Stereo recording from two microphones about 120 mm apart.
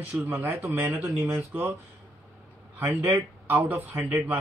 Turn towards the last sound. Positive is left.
turn(degrees=-15)  # may be behind; listen again after turning